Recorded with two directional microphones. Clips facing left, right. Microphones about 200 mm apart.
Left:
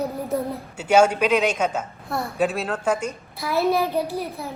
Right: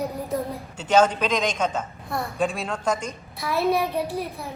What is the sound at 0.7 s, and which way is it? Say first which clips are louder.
Speech: left 2 dB; 10° left (ahead or behind).